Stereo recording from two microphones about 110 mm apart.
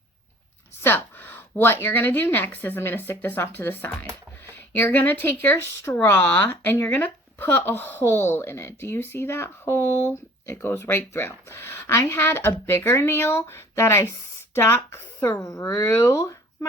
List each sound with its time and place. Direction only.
0.8 s speech: 20° left (ahead or behind)